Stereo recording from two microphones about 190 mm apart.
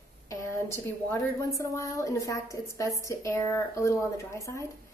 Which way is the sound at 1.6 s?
15° left (ahead or behind).